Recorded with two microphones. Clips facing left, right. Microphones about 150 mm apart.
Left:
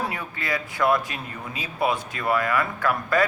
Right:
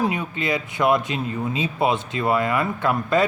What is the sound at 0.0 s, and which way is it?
Speech, 20° right (ahead or behind).